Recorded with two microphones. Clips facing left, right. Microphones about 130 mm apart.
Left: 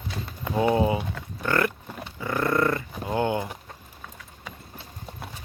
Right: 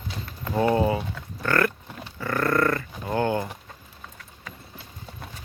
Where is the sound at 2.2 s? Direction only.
15° left (ahead or behind).